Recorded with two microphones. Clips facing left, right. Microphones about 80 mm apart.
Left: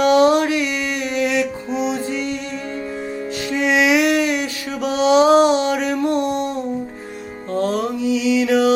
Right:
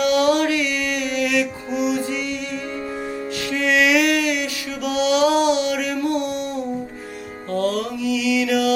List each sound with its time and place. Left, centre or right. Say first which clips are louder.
0.0 s music: left 4 dB; left
3.5 s a sound: left 2 dB; left
7.5 s mantra: left 2 dB; left